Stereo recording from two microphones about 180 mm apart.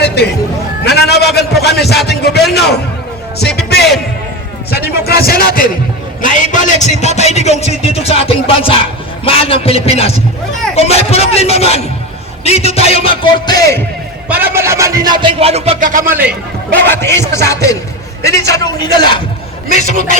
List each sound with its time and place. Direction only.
0.0 s a sound: 65° left (ahead or behind)
0.9 s a man's voice: 65° left (ahead or behind)
1.6 s a sound: 65° left (ahead or behind)
2.0 s a man's voice: 65° left (ahead or behind)
3.3 s music: 65° left (ahead or behind)
6.2 s a man's voice: 45° left (ahead or behind)
14.3 s speech: 10° right (ahead or behind); by 16.1 s 50° right (ahead or behind)
16.8 s music: 10° left (ahead or behind)
18.2 s a man's voice: 15° left (ahead or behind)
19.7 s a man's voice: 40° left (ahead or behind)